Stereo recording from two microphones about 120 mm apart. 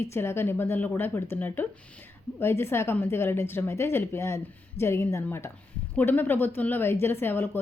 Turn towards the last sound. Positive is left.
turn(degrees=15)  # may be behind; listen again after turning